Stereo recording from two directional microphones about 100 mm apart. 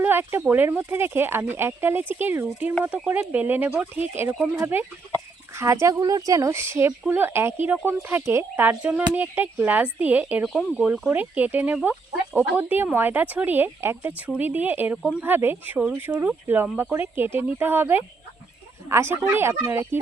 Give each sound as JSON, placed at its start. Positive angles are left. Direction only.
{"t": 0.0, "sound": "speech", "side_deg": -20}
{"t": 10.4, "sound": "speech", "side_deg": -5}